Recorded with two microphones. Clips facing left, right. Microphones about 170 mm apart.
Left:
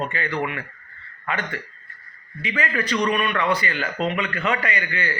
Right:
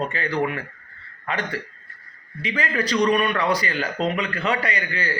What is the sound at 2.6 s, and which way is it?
A man's voice, 35° right (ahead or behind).